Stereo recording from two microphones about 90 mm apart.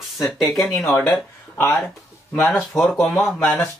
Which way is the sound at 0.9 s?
20° left (ahead or behind).